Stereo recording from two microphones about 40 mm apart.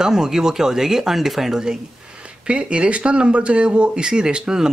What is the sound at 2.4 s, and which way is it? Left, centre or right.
Speech, right.